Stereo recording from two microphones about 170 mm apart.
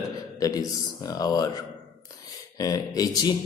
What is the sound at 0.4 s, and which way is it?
A man's voice, 20° left (ahead or behind).